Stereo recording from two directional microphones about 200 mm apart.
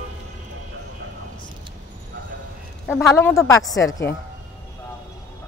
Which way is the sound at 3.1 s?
15° left (ahead or behind).